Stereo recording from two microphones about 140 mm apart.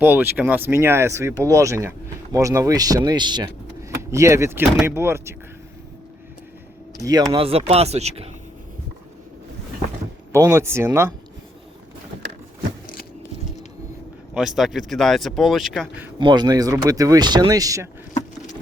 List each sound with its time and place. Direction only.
0.0 s speech: 15° right (ahead or behind)
7.0 s speech: 25° right (ahead or behind)
7.3 s speech: 45° right (ahead or behind)
10.3 s speech: 20° right (ahead or behind)
14.3 s speech: centre (ahead or behind)
16.1 s speech: 30° right (ahead or behind)